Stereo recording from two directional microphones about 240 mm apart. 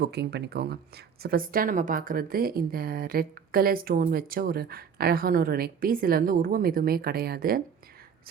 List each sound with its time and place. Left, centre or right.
0.0 s speech: right